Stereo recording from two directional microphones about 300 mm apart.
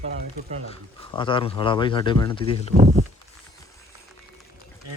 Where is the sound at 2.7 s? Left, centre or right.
Right.